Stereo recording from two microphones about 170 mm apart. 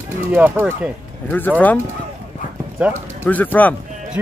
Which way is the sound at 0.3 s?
10° right (ahead or behind).